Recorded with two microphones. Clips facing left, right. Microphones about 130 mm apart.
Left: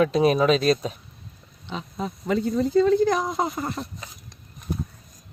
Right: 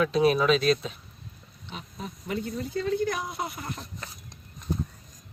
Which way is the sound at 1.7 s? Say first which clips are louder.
Left 8 dB; 90° left.